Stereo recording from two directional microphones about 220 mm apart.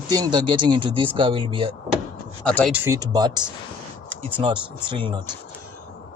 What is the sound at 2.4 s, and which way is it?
Speech, 5° left (ahead or behind).